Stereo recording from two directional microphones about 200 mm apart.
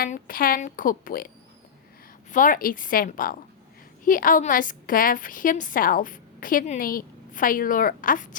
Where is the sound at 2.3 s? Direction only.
40° left (ahead or behind).